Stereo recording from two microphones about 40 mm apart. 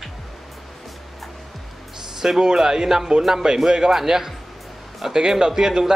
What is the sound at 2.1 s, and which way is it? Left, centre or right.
A man's voice, centre.